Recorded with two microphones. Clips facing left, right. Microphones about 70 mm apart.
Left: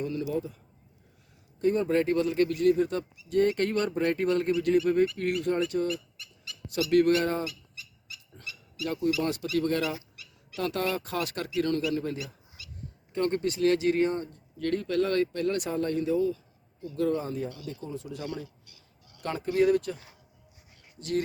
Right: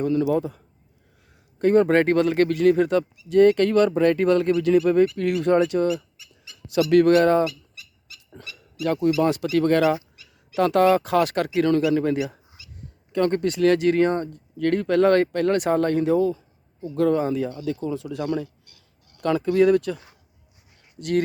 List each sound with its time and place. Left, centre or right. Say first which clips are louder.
0.0 s speech: right 9 dB; right
1.5 s speech: right 8 dB; right
6.7 s speech: right 6 dB; right
8.3 s a sound: right 5 dB; right
9.3 s speech: right 8 dB; right
13.1 s speech: right 6 dB; right
14.7 s speech: right 9 dB; right
17.8 s a sound: right 7 dB; right
19.2 s speech: right 7 dB; right